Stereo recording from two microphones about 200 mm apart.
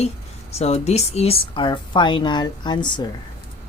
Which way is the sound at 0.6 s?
35° left (ahead or behind).